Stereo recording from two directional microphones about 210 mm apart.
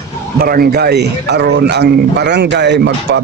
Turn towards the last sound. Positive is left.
turn(degrees=-55)  # may be behind; listen again after turning